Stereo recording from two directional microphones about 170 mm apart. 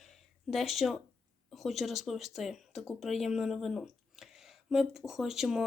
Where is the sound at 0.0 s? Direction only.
Centre (ahead or behind).